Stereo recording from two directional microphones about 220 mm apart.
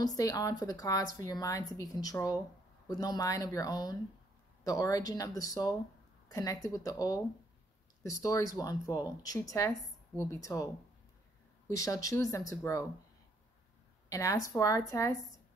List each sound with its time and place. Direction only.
0.0 s speech: 15° left (ahead or behind)
14.0 s a woman's voice: 15° left (ahead or behind)